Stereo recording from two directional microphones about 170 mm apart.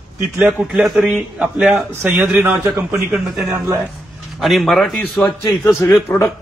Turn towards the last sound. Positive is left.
turn(degrees=15)  # may be behind; listen again after turning